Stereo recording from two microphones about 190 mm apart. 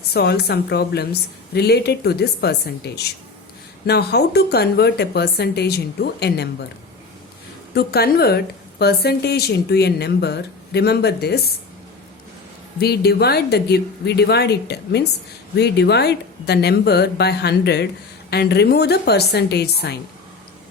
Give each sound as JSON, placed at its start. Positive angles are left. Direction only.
{"t": 0.1, "sound": "speech", "side_deg": 60}
{"t": 7.7, "sound": "speech", "side_deg": 55}
{"t": 12.8, "sound": "speech", "side_deg": 55}